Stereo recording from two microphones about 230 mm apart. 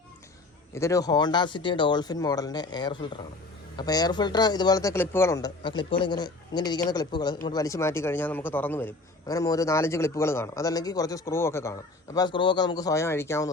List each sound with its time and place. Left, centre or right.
0.7 s a man's voice: centre